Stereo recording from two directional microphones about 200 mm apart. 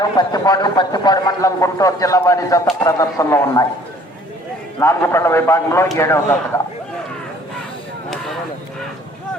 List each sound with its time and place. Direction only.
0.0 s a man's voice: 20° left (ahead or behind)
4.8 s a man's voice: 15° left (ahead or behind)